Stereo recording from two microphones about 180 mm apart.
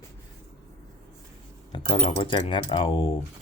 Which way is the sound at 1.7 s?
25° left (ahead or behind).